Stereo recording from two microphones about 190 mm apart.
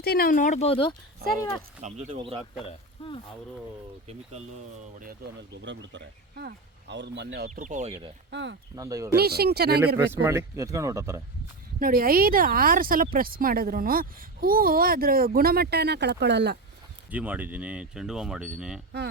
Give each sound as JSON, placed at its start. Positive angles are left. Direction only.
{"t": 0.0, "sound": "speech", "side_deg": 55}
{"t": 1.8, "sound": "speech", "side_deg": -35}
{"t": 4.9, "sound": "a woman's voice", "side_deg": -50}
{"t": 5.6, "sound": "speech", "side_deg": -70}
{"t": 7.4, "sound": "a woman's voice", "side_deg": -45}
{"t": 8.3, "sound": "speech", "side_deg": -70}
{"t": 8.7, "sound": "speech", "side_deg": -15}
{"t": 9.1, "sound": "speech", "side_deg": -55}
{"t": 10.1, "sound": "speech", "side_deg": -15}
{"t": 11.8, "sound": "a woman's voice", "side_deg": -50}
{"t": 17.1, "sound": "speech", "side_deg": -10}